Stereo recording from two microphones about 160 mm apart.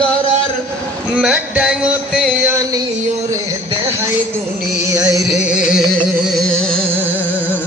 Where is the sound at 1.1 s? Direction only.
5° right (ahead or behind).